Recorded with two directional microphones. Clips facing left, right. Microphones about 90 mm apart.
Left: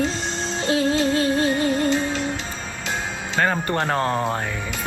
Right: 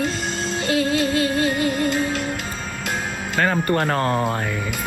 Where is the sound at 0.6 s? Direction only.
30° left (ahead or behind).